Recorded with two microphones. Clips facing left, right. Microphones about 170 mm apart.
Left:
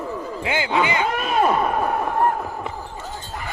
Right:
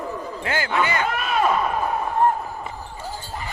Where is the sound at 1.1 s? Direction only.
40° left (ahead or behind).